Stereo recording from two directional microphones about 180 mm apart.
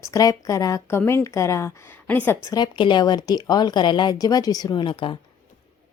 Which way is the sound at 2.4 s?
25° left (ahead or behind).